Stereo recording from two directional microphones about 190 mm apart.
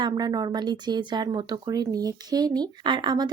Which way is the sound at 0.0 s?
20° right (ahead or behind).